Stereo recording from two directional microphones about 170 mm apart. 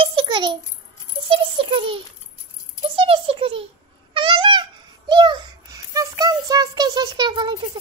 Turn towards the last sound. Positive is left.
turn(degrees=-25)  # may be behind; listen again after turning